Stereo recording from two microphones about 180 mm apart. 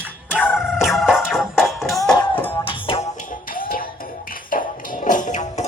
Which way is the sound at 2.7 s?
30° left (ahead or behind).